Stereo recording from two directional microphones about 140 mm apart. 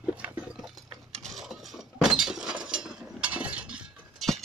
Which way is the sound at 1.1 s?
Centre (ahead or behind).